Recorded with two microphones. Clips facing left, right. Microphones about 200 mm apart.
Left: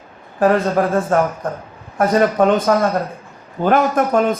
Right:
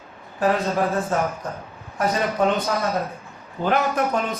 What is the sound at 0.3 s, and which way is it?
A man's voice, 50° left (ahead or behind).